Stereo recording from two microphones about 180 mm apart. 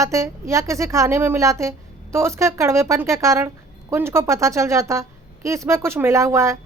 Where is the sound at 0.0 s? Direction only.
15° right (ahead or behind).